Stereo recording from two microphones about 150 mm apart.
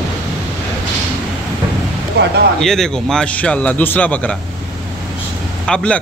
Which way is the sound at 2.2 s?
90° right.